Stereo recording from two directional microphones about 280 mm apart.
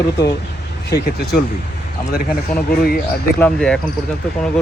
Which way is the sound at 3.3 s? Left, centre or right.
Centre.